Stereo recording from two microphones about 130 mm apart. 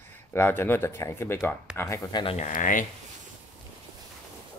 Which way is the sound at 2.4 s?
90° left.